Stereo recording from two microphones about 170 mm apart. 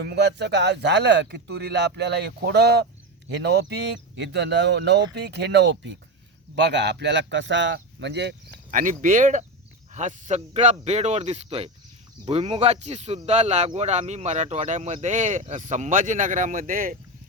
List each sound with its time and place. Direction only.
0.0 s speech: 80° right
5.1 s speech: 80° right
8.7 s speech: 50° right (ahead or behind)